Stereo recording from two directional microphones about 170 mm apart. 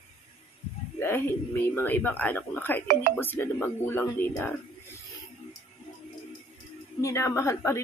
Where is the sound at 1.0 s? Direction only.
10° left (ahead or behind).